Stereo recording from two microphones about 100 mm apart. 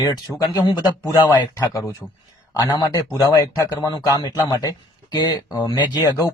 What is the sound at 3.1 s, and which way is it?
Speech, 30° left (ahead or behind).